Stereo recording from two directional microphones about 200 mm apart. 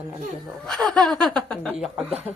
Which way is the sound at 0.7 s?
5° left (ahead or behind).